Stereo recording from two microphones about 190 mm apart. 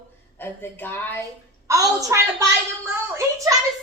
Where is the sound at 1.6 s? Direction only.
15° right (ahead or behind).